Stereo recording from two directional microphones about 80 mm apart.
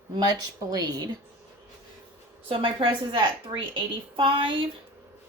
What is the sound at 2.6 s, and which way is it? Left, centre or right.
A woman's voice, right.